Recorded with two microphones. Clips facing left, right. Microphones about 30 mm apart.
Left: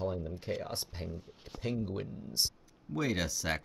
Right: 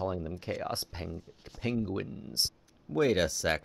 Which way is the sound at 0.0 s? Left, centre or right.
Centre.